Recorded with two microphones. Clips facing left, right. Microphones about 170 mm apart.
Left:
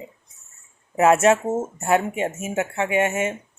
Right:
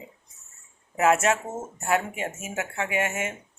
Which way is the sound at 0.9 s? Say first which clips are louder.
Left 6 dB; 30° left (ahead or behind).